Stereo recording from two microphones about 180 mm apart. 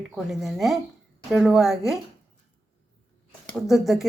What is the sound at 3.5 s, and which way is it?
Speech, centre (ahead or behind).